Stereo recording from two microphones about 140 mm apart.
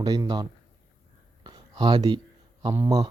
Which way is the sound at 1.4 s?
35° right (ahead or behind).